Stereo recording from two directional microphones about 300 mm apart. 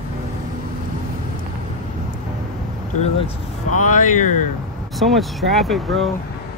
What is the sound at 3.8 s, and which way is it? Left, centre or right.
Speech, left.